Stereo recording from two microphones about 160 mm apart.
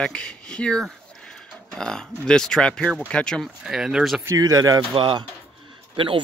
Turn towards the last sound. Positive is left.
turn(degrees=-30)  # may be behind; listen again after turning